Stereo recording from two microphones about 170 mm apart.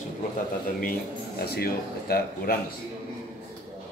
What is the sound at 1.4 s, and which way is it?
Speech, 65° left (ahead or behind).